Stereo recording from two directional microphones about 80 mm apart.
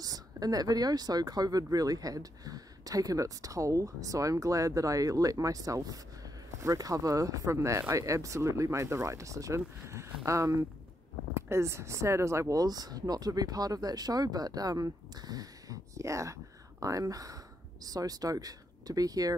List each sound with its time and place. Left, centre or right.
0.0 s speech: right